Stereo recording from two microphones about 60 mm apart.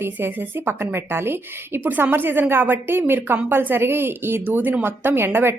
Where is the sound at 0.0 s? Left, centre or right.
Right.